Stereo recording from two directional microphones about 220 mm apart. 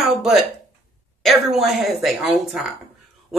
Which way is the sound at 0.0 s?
Centre (ahead or behind).